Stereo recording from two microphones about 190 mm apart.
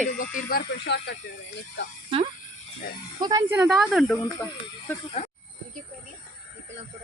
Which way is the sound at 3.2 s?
20° right (ahead or behind).